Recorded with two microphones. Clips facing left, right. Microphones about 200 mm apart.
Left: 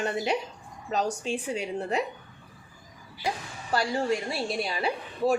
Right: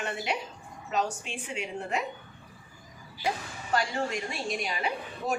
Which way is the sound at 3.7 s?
35° left (ahead or behind).